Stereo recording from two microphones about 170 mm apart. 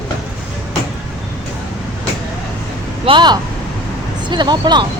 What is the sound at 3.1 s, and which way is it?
Speech, 25° right (ahead or behind).